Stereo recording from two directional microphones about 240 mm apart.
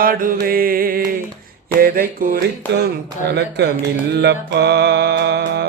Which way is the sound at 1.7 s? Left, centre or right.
Right.